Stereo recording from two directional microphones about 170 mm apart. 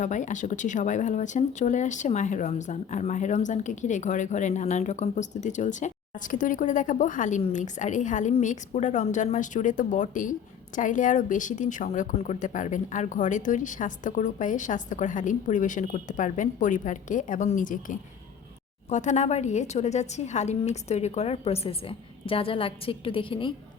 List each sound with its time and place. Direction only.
0.0 s a woman's voice: 45° left (ahead or behind); by 23.6 s 30° left (ahead or behind)